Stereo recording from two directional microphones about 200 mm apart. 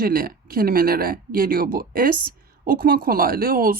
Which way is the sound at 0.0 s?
45° right (ahead or behind).